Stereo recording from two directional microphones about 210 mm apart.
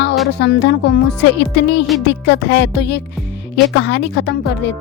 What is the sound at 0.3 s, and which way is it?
A woman's voice, 55° left (ahead or behind).